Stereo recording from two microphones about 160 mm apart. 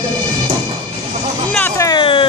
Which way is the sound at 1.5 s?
15° left (ahead or behind).